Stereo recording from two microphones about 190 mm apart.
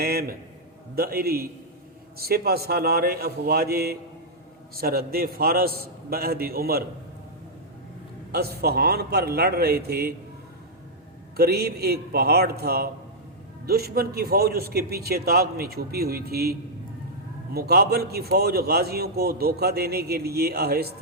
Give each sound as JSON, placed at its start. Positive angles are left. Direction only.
{"t": 0.0, "sound": "a man's voice", "side_deg": -55}
{"t": 8.3, "sound": "a man's voice", "side_deg": -55}
{"t": 11.3, "sound": "a man's voice", "side_deg": -55}